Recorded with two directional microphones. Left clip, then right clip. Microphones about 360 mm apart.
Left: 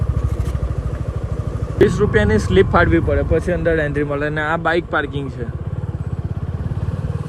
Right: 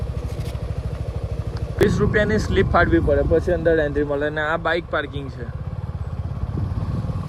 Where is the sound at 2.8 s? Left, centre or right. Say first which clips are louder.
Left 1 dB; left.